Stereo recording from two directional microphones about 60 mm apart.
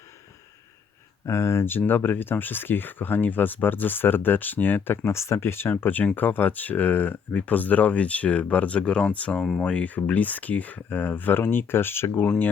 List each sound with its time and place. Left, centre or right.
1.2 s speech: left
5.1 s speech: left